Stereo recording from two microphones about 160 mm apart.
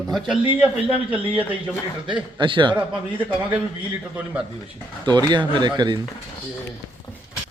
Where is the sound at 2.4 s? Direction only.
30° right (ahead or behind).